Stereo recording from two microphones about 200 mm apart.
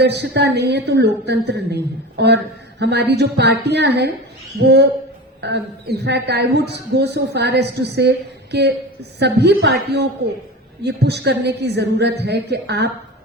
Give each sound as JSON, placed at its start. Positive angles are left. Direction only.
{"t": 0.0, "sound": "a woman's voice", "side_deg": -55}